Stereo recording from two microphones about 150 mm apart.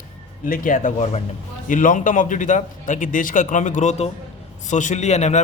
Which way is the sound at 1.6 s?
60° left (ahead or behind).